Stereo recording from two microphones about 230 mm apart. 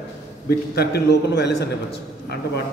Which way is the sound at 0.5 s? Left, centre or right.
Left.